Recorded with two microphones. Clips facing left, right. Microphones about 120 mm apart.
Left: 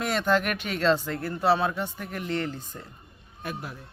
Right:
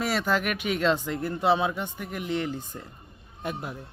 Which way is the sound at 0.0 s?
5° right (ahead or behind).